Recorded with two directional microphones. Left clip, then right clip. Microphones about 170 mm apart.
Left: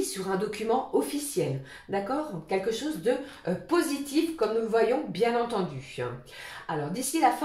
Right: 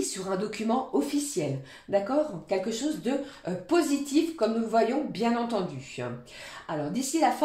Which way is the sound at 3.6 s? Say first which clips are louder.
Right 3 dB; 35° right (ahead or behind).